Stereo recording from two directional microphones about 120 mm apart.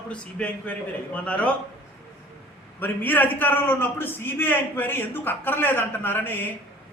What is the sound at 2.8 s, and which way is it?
A man's voice, 15° left (ahead or behind).